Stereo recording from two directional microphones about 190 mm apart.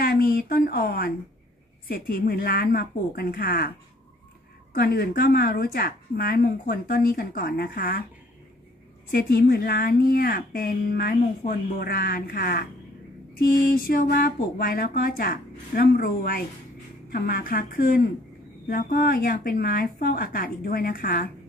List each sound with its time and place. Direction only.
0.0 s speech: 50° left (ahead or behind)
4.7 s speech: 55° left (ahead or behind)
9.1 s speech: 55° left (ahead or behind)